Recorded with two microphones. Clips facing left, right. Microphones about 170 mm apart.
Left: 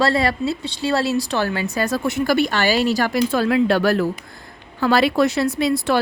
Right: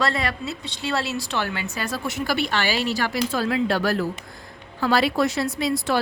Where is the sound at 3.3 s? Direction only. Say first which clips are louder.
Left 6 dB; 60° left (ahead or behind).